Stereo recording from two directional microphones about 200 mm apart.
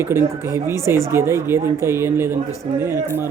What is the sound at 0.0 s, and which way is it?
Speech, 10° right (ahead or behind).